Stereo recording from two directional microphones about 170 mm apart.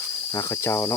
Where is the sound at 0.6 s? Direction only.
15° left (ahead or behind).